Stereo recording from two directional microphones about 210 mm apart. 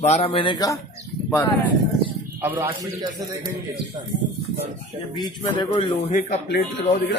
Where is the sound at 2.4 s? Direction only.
10° right (ahead or behind).